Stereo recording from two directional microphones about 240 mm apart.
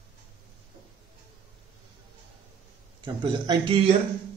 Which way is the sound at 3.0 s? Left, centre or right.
Centre.